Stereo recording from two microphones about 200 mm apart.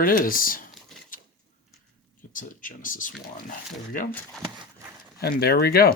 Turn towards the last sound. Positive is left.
turn(degrees=50)  # may be behind; listen again after turning